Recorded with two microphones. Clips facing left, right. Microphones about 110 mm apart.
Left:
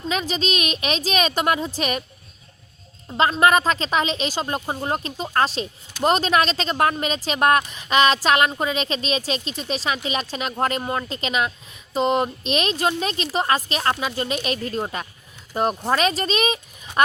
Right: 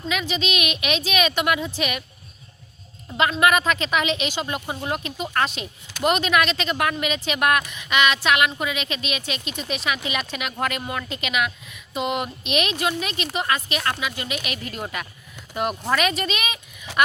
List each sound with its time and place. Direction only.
0.1 s a woman's voice: 35° left (ahead or behind)
3.1 s a woman's voice: 35° left (ahead or behind)
16.9 s a sound: 90° right